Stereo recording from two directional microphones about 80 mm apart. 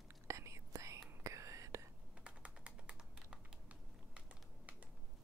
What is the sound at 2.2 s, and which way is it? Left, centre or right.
Typing, centre.